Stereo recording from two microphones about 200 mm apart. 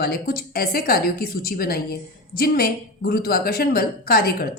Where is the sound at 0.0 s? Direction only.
50° left (ahead or behind).